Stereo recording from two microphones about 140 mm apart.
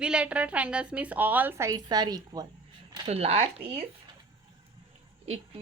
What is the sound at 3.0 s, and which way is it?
Speech, 45° right (ahead or behind).